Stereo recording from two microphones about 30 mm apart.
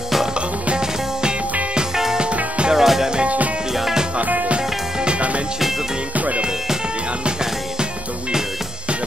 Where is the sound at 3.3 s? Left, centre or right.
Right.